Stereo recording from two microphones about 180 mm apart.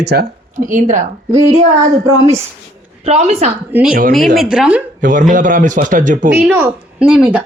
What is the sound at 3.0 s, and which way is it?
Speech, 35° right (ahead or behind).